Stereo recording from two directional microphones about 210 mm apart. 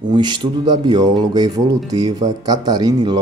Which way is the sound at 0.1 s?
20° right (ahead or behind).